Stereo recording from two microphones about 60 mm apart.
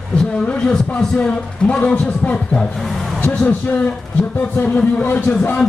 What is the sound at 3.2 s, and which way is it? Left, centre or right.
Speech, left.